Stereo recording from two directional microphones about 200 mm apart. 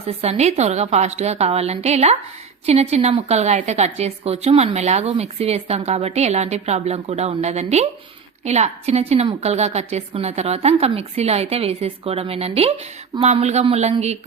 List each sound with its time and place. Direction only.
0.0 s a woman's voice: 30° right (ahead or behind)